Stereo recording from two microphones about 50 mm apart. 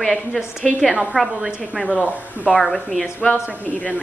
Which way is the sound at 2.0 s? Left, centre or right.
Right.